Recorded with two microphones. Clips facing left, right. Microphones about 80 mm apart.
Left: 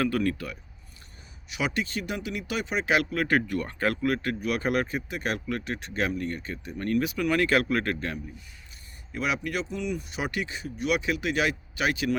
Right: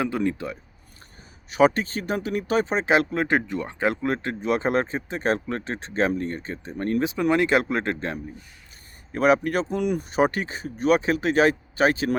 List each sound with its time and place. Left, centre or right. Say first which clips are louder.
0.0 s speech: right 1 dB; centre
1.5 s speech: right 10 dB; right
9.1 s speech: right 9 dB; right